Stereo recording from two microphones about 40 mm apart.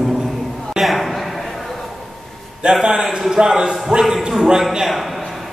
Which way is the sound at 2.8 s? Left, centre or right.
Centre.